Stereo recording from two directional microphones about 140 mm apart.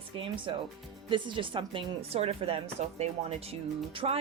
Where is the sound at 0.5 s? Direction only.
35° right (ahead or behind).